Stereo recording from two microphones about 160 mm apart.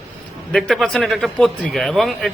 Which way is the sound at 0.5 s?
5° left (ahead or behind).